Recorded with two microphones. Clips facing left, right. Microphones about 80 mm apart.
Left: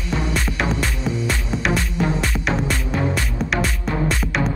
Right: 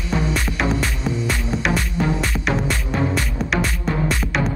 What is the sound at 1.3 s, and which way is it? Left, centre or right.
Music, centre.